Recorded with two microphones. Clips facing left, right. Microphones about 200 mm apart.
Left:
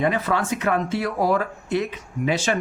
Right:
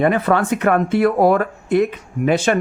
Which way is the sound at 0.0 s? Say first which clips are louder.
Right 6 dB; 55° right (ahead or behind).